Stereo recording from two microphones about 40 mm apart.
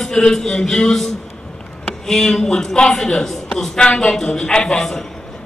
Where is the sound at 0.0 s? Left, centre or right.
Centre.